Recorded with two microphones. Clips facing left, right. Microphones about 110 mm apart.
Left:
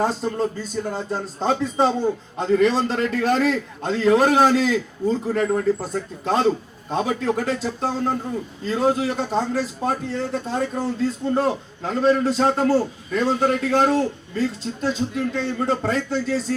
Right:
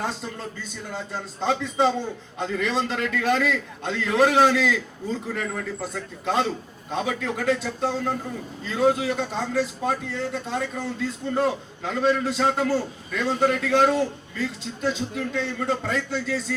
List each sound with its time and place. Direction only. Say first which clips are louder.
0.0 s a man's voice: left 9 dB; 40° left (ahead or behind)